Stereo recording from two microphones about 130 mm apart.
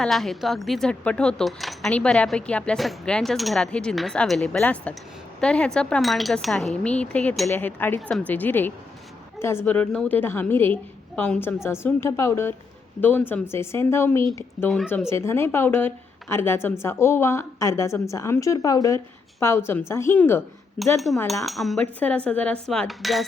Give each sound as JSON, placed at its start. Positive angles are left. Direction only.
{"t": 0.0, "sound": "speech", "side_deg": 0}
{"t": 7.5, "sound": "speech", "side_deg": 15}
{"t": 14.6, "sound": "speech", "side_deg": 0}
{"t": 15.1, "sound": "a woman's voice", "side_deg": 20}
{"t": 20.8, "sound": "speech", "side_deg": 5}